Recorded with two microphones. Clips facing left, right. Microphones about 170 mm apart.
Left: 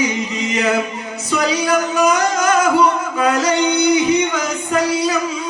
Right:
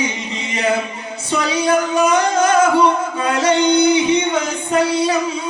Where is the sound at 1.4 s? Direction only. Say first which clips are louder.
Right 1 dB; 30° right (ahead or behind).